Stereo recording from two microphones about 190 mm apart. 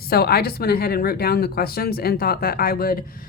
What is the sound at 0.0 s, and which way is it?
Speech, 55° left (ahead or behind).